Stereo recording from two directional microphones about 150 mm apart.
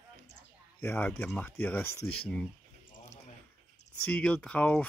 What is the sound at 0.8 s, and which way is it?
Speech, 15° left (ahead or behind).